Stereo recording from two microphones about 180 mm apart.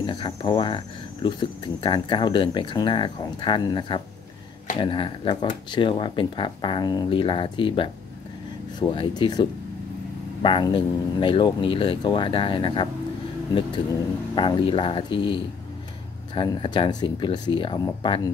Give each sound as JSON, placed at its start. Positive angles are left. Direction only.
{"t": 0.0, "sound": "speech", "side_deg": 25}
{"t": 14.3, "sound": "speech", "side_deg": 30}